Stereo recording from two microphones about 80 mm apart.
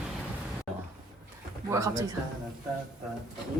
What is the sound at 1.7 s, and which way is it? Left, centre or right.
Speech, right.